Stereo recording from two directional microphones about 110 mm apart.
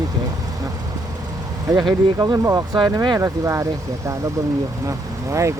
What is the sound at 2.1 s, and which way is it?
Speech, 30° right (ahead or behind).